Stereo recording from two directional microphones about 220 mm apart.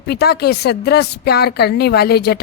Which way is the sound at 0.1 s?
45° left (ahead or behind).